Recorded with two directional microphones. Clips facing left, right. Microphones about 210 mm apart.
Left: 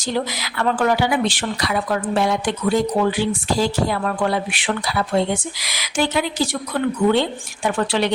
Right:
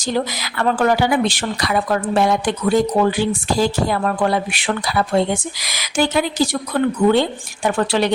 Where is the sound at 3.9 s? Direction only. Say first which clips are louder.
Right 2 dB; 40° right (ahead or behind).